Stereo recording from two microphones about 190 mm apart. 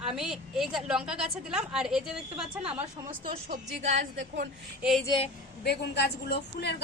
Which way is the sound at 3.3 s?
45° right (ahead or behind).